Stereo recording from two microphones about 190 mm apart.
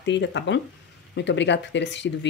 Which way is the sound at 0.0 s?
70° left (ahead or behind).